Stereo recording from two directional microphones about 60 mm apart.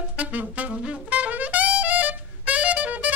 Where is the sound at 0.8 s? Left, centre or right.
Right.